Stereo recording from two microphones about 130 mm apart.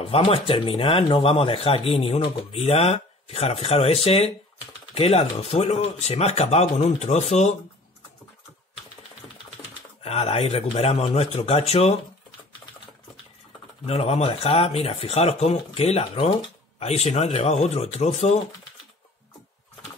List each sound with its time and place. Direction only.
0.0 s speech: 45° left (ahead or behind)
10.0 s speech: 55° left (ahead or behind)
13.8 s speech: 55° left (ahead or behind)